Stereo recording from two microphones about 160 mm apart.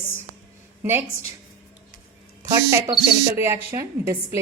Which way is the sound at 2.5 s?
20° right (ahead or behind).